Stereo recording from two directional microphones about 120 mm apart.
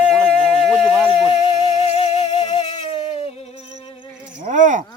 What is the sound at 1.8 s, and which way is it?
Music, 60° left (ahead or behind).